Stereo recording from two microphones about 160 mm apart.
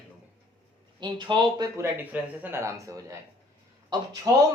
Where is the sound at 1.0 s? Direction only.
30° right (ahead or behind).